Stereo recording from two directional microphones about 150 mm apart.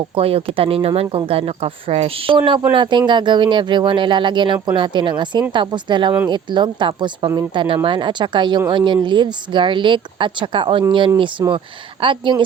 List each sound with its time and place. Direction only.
0.2 s speech: 40° right (ahead or behind)